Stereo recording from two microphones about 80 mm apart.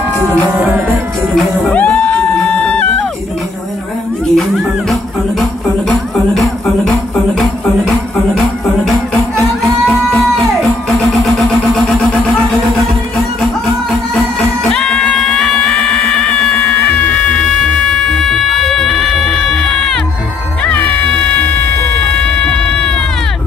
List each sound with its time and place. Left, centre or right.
0.5 s music: right
1.8 s music: centre
4.4 s music: centre
6.3 s music: centre
14.7 s music: centre
20.6 s music: left